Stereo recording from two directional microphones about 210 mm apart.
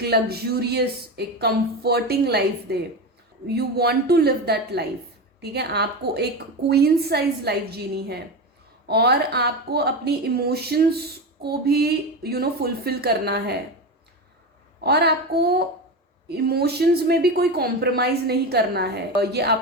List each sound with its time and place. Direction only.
0.0 s a woman's voice: 50° right (ahead or behind)
14.8 s a woman's voice: 50° right (ahead or behind)